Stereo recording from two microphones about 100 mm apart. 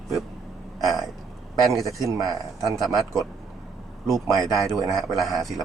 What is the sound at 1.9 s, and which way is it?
Speech, 35° right (ahead or behind).